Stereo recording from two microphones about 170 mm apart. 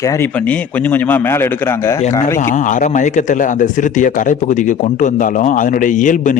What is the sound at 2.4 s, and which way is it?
A man's voice, 50° left (ahead or behind).